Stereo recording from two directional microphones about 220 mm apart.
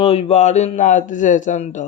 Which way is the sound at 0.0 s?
30° left (ahead or behind).